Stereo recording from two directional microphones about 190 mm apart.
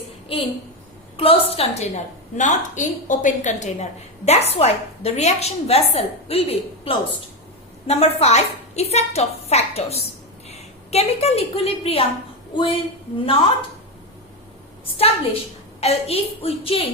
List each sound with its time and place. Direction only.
0.3 s a woman's voice: 30° left (ahead or behind)
14.9 s a woman's voice: 30° left (ahead or behind)